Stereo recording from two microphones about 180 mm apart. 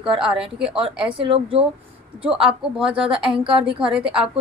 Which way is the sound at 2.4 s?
5° right (ahead or behind).